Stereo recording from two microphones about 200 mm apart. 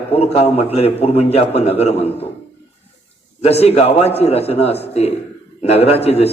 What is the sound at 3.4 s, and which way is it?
A man's voice, 30° left (ahead or behind).